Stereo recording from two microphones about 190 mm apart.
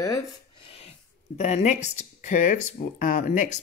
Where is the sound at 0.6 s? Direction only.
30° left (ahead or behind).